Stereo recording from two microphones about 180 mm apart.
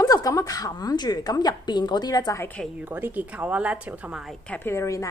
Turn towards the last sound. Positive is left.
turn(degrees=15)  # may be behind; listen again after turning